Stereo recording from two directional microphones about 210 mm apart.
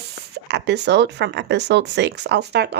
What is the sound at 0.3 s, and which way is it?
Speech, 55° right (ahead or behind).